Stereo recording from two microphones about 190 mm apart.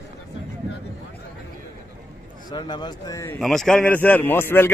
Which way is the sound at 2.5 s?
25° left (ahead or behind).